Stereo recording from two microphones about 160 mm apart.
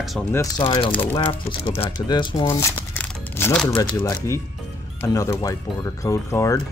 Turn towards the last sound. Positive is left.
turn(degrees=20)  # may be behind; listen again after turning